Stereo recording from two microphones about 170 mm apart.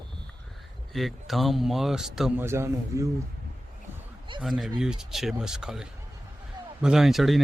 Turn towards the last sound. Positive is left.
turn(degrees=0)  # may be behind; listen again after turning